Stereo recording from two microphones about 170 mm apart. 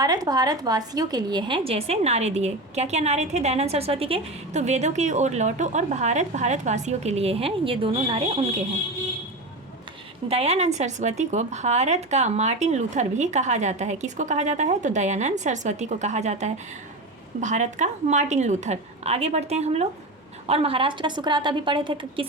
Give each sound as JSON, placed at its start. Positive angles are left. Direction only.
{"t": 0.0, "sound": "a woman's voice", "side_deg": -20}
{"t": 10.2, "sound": "a woman's voice", "side_deg": -35}